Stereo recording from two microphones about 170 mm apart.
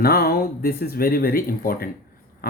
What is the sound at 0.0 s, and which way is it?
Speech, 65° left (ahead or behind).